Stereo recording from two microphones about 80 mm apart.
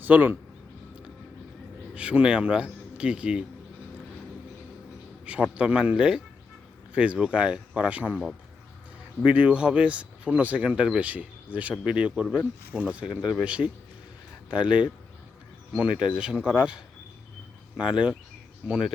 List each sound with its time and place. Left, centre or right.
0.0 s speech: right
2.0 s speech: centre
5.2 s speech: centre